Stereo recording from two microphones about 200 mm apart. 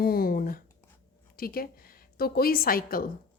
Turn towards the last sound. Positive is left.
turn(degrees=45)  # may be behind; listen again after turning